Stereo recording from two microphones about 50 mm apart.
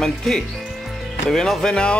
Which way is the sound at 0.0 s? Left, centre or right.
Centre.